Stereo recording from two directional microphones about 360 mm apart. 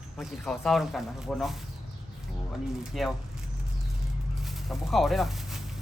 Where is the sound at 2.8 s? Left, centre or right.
Centre.